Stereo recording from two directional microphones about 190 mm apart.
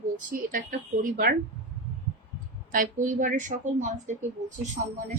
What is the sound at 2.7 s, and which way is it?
A woman's voice, 45° right (ahead or behind).